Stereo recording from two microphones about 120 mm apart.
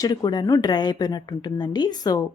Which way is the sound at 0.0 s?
35° left (ahead or behind).